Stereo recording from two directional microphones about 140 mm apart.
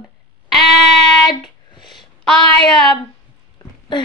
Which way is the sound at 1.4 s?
35° left (ahead or behind).